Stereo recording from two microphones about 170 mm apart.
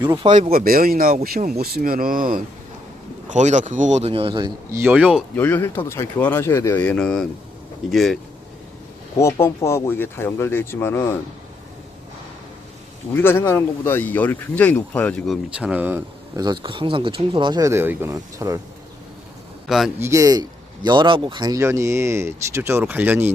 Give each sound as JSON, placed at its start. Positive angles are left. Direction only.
{"t": 0.0, "sound": "speech", "side_deg": -25}
{"t": 0.3, "sound": "speech", "side_deg": -45}
{"t": 3.2, "sound": "speech", "side_deg": -45}
{"t": 4.8, "sound": "speech", "side_deg": -10}
{"t": 5.4, "sound": "speech", "side_deg": 10}
{"t": 9.1, "sound": "speech", "side_deg": 15}
{"t": 13.1, "sound": "speech", "side_deg": 15}
{"t": 15.5, "sound": "speech", "side_deg": -10}
{"t": 16.3, "sound": "speech", "side_deg": -25}
{"t": 19.6, "sound": "a man's voice", "side_deg": 0}
{"t": 20.0, "sound": "speech", "side_deg": -20}